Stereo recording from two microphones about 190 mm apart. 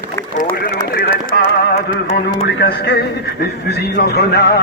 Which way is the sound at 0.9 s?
55° left (ahead or behind).